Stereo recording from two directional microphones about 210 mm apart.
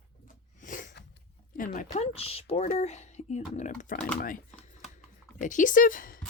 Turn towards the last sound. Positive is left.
turn(degrees=40)  # may be behind; listen again after turning